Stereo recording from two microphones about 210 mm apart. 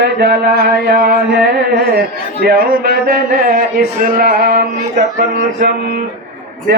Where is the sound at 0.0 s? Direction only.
50° right (ahead or behind).